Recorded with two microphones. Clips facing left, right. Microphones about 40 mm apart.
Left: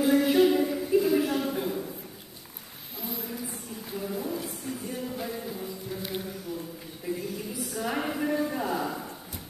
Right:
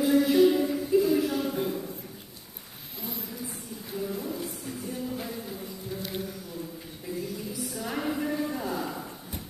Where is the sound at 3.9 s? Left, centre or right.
Centre.